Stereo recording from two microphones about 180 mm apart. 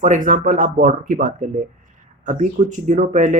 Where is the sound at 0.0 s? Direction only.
45° right (ahead or behind).